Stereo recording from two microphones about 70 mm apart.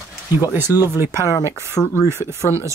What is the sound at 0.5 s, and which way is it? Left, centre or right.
Speech, right.